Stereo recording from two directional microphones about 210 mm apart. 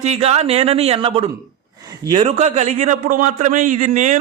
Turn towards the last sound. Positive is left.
turn(degrees=-35)  # may be behind; listen again after turning